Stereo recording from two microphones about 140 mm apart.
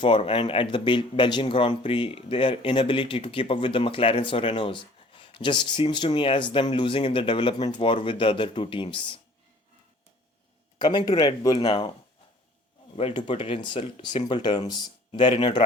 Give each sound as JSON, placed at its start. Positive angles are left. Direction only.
{"t": 0.0, "sound": "speech", "side_deg": 40}
{"t": 10.8, "sound": "speech", "side_deg": 30}
{"t": 13.0, "sound": "speech", "side_deg": 40}